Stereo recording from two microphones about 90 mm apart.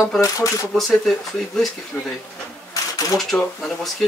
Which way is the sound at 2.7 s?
40° left (ahead or behind).